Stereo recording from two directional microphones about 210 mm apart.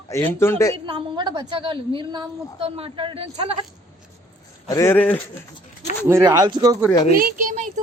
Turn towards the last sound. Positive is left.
turn(degrees=-35)  # may be behind; listen again after turning